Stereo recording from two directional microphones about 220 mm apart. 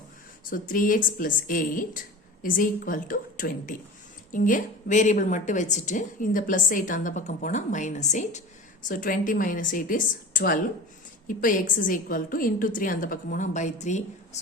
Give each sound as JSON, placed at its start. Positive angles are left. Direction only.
{"t": 0.5, "sound": "a woman's voice", "side_deg": 40}